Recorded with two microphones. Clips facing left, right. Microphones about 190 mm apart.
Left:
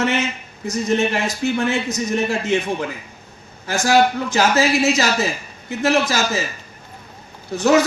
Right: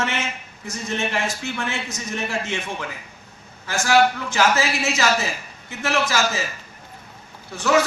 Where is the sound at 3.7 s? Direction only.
35° left (ahead or behind).